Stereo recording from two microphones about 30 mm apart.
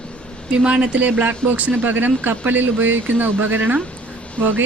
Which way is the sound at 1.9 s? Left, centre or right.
Right.